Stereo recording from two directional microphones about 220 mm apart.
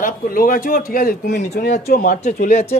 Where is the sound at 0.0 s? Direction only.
40° left (ahead or behind).